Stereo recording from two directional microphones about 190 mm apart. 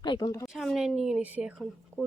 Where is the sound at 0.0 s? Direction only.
20° left (ahead or behind).